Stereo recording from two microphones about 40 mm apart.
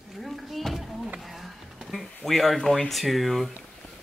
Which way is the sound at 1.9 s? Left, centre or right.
Centre.